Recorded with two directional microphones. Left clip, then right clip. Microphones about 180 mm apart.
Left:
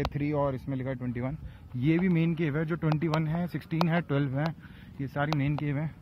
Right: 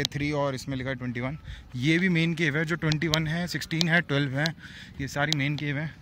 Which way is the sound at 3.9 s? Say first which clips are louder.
Right 5 dB; 10° right (ahead or behind).